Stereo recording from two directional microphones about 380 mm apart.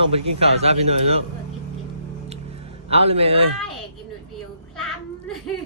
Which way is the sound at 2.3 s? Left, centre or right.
Centre.